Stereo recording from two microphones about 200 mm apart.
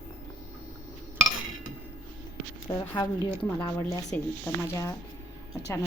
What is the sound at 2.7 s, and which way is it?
Speech, 20° left (ahead or behind).